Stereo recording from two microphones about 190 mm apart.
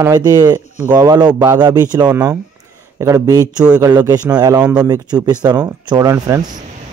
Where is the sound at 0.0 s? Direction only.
20° right (ahead or behind).